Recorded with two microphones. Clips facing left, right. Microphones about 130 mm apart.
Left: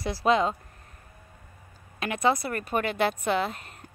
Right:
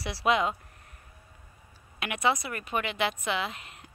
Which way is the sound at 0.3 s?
35° left (ahead or behind).